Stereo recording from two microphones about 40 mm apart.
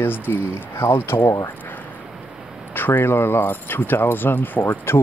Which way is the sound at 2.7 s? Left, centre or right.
Left.